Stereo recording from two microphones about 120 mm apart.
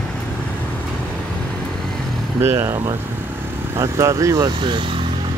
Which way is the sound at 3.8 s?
25° right (ahead or behind).